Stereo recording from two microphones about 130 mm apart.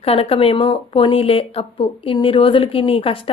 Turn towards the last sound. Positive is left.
turn(degrees=45)  # may be behind; listen again after turning